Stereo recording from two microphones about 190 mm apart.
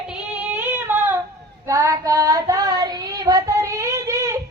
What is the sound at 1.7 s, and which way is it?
Child singing, 15° right (ahead or behind).